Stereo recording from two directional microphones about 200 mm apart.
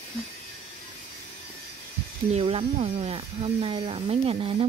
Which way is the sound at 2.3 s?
30° right (ahead or behind).